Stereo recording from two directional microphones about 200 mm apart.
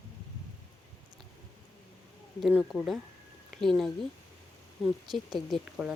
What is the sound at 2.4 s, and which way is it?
Speech, 5° right (ahead or behind).